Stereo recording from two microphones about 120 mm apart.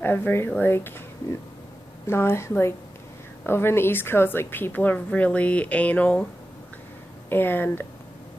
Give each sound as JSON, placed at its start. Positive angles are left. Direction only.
{"t": 0.0, "sound": "a woman's voice", "side_deg": 15}
{"t": 2.0, "sound": "a woman's voice", "side_deg": 20}
{"t": 7.2, "sound": "a woman's voice", "side_deg": 15}